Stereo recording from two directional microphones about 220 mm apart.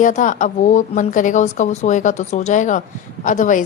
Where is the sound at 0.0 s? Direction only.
35° left (ahead or behind).